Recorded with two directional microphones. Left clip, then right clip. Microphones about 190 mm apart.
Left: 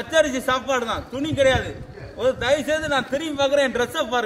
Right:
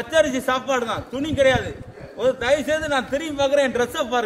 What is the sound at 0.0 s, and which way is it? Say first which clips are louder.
A man's voice: right 1 dB; 5° right (ahead or behind).